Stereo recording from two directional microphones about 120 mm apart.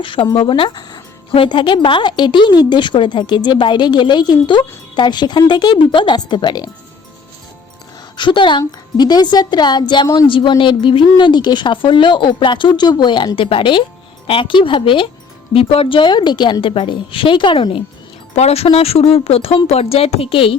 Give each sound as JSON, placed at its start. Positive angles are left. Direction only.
{"t": 0.0, "sound": "speech", "side_deg": 45}
{"t": 8.1, "sound": "speech", "side_deg": 40}
{"t": 10.2, "sound": "speech", "side_deg": 45}
{"t": 18.3, "sound": "speech", "side_deg": 60}